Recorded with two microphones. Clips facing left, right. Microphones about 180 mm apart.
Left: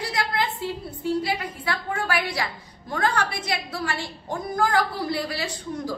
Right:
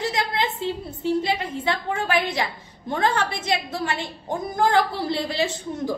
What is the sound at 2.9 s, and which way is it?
A woman's voice, 25° right (ahead or behind).